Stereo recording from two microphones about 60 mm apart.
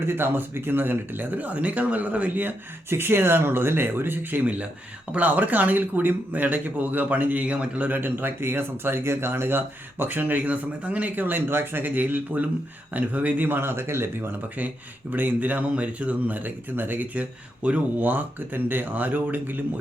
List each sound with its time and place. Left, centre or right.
0.0 s speech: right
15.1 s speech: right